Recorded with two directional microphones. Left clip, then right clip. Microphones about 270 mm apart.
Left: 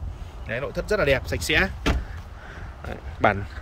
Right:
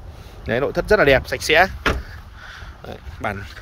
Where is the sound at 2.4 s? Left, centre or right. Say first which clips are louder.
Right 2 dB; right.